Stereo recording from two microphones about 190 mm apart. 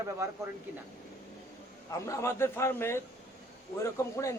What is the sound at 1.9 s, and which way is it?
A man's voice, 15° left (ahead or behind).